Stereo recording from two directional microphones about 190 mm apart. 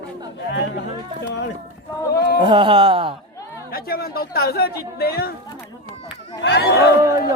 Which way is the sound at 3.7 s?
50° left (ahead or behind).